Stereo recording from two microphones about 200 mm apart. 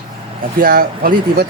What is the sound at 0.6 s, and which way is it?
Speech, 45° right (ahead or behind).